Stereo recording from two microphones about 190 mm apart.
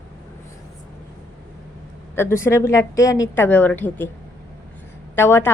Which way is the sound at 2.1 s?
15° left (ahead or behind).